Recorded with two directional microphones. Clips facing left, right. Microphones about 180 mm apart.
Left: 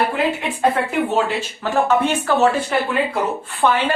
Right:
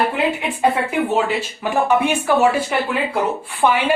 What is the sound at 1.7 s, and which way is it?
Speech, 15° right (ahead or behind).